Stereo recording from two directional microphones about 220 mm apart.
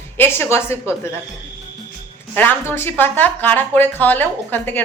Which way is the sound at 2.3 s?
10° left (ahead or behind).